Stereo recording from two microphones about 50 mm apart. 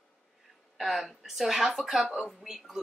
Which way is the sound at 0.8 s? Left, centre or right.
Centre.